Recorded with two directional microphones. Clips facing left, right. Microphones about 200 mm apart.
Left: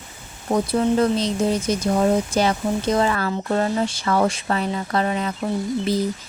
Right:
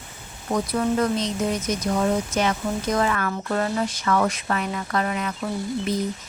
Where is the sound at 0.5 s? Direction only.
30° left (ahead or behind).